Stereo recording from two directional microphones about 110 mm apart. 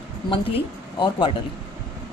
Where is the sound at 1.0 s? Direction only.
45° left (ahead or behind).